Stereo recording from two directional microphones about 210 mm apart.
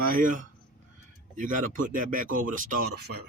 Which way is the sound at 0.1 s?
40° right (ahead or behind).